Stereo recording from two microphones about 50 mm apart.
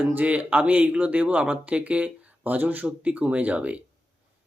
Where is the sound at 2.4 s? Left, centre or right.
Right.